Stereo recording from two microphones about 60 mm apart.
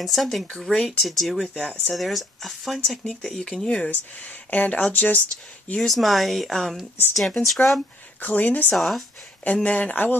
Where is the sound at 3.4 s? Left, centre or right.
Centre.